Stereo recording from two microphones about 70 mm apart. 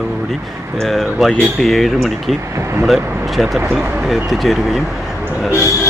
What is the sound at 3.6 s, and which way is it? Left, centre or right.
Speech, right.